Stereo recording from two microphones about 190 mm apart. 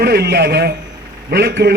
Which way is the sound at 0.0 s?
60° right (ahead or behind).